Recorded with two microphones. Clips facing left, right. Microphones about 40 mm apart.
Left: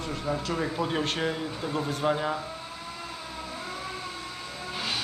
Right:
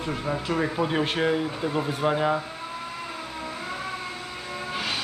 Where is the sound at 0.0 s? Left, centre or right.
Right.